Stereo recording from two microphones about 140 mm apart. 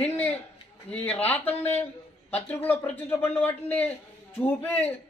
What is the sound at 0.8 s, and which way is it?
Speech, 10° left (ahead or behind).